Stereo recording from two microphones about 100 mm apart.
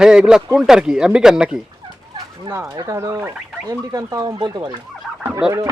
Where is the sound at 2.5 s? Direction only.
25° right (ahead or behind).